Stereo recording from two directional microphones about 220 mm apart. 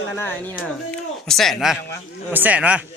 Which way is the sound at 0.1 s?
10° left (ahead or behind).